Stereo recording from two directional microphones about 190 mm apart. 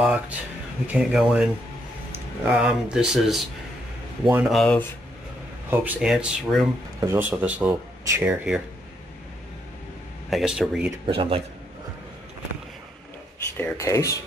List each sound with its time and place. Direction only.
0.0 s speech: 5° right (ahead or behind)
10.3 s speech: centre (ahead or behind)
11.1 s a man's voice: 30° right (ahead or behind)
13.6 s speech: 15° left (ahead or behind)